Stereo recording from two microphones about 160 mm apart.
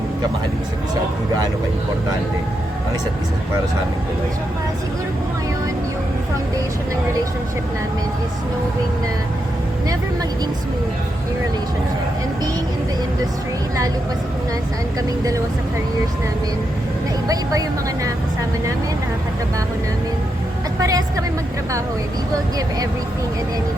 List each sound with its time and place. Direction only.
20.8 s a woman's voice: 20° right (ahead or behind)